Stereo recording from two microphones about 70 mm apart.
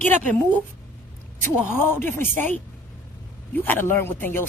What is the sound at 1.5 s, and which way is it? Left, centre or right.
Speech, left.